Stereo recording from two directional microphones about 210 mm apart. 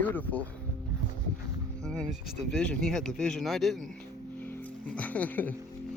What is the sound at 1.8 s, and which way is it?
Speech, 5° left (ahead or behind).